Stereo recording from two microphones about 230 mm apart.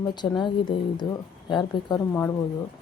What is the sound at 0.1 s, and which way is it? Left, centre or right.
A woman's voice, centre.